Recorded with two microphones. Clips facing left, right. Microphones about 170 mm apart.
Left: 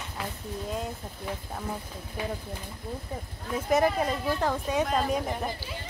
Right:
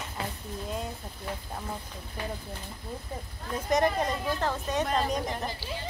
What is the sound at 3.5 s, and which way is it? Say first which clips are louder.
Speech: left 2 dB; 5° left (ahead or behind).